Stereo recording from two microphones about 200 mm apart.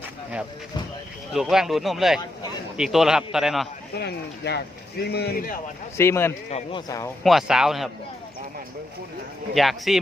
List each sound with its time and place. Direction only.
1.3 s a man's voice: centre (ahead or behind)
3.9 s speech: 55° left (ahead or behind)
6.0 s a man's voice: 10° left (ahead or behind)
6.5 s speech: 25° left (ahead or behind)
7.3 s a man's voice: centre (ahead or behind)
9.6 s a man's voice: centre (ahead or behind)